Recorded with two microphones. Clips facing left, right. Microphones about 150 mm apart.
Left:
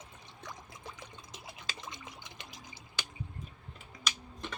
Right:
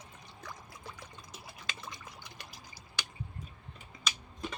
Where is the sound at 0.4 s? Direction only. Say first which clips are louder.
Left 1 dB; 20° left (ahead or behind).